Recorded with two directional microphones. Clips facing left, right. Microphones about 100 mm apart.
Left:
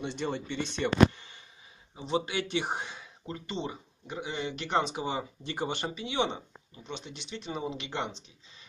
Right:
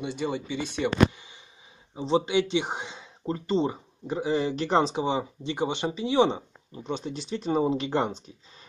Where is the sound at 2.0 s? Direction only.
30° right (ahead or behind).